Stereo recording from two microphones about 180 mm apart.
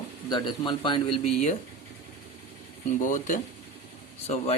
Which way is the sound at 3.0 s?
45° left (ahead or behind).